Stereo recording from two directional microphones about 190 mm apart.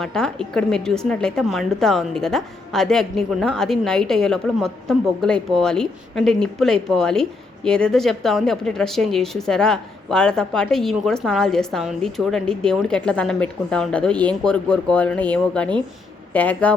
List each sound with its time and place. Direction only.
0.0 s a woman's voice: 5° left (ahead or behind)